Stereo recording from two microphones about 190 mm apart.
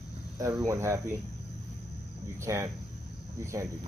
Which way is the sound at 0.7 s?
15° right (ahead or behind).